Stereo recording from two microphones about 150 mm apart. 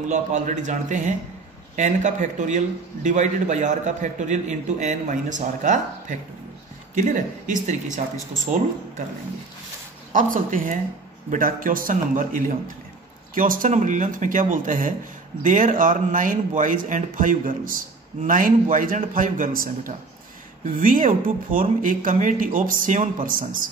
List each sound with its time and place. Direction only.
0.1 s a man's voice: 55° right (ahead or behind)
10.1 s a man's voice: 65° right (ahead or behind)